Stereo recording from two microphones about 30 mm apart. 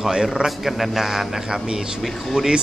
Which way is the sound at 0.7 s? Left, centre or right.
Centre.